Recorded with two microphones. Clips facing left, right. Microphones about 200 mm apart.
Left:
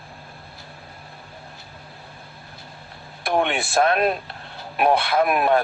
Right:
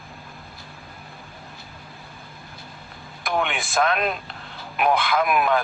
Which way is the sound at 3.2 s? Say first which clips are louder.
Left 4 dB; 35° left (ahead or behind).